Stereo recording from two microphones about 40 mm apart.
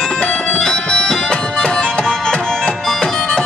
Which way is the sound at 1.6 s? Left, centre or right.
Centre.